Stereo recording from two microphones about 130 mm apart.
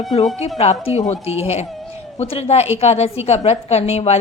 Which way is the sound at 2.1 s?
55° left (ahead or behind).